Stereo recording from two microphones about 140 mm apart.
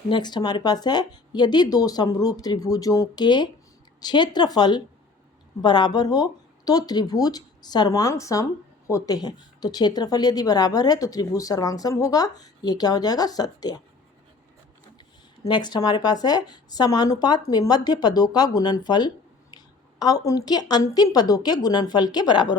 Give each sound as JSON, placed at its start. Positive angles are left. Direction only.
{"t": 0.1, "sound": "speech", "side_deg": 35}
{"t": 15.4, "sound": "speech", "side_deg": 30}